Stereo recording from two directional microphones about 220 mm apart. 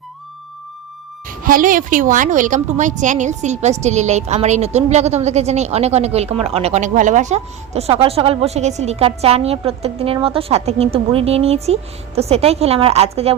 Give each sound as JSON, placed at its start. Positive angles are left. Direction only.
{"t": 1.3, "sound": "a woman's voice", "side_deg": -40}